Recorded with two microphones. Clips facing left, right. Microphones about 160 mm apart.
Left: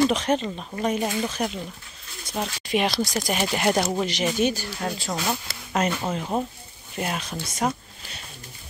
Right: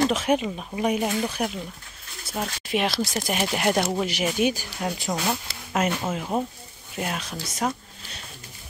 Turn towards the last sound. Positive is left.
turn(degrees=0)  # may be behind; listen again after turning